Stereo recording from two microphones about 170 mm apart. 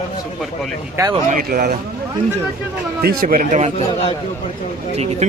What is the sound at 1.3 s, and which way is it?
Speech, 55° right (ahead or behind).